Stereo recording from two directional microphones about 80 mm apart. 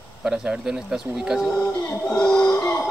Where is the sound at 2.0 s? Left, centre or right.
Centre.